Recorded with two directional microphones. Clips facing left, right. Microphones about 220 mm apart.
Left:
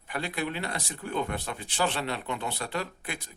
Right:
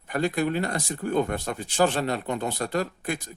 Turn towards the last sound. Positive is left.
turn(degrees=-45)  # may be behind; listen again after turning